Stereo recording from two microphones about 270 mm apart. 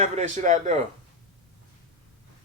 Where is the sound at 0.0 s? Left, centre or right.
Right.